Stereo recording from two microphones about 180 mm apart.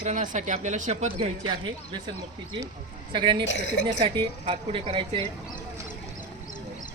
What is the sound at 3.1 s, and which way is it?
Speech, 25° right (ahead or behind).